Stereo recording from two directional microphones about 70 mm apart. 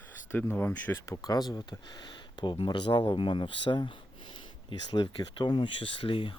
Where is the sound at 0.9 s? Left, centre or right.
Left.